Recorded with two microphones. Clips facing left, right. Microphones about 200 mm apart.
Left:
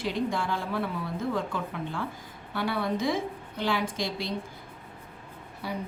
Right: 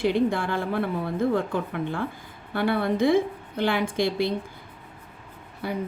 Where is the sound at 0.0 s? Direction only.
60° right (ahead or behind).